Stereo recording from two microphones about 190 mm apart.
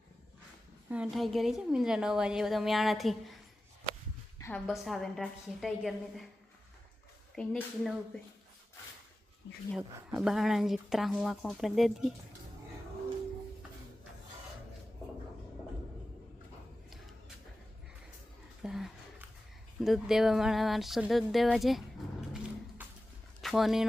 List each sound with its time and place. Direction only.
0.9 s a woman's voice: 5° right (ahead or behind)
4.4 s a sound: 15° left (ahead or behind)
4.6 s a woman's voice: centre (ahead or behind)
7.3 s a woman's voice: 5° left (ahead or behind)
9.7 s a woman's voice: 5° right (ahead or behind)
18.6 s a sound: centre (ahead or behind)
19.8 s a woman's voice: centre (ahead or behind)
23.4 s speech: centre (ahead or behind)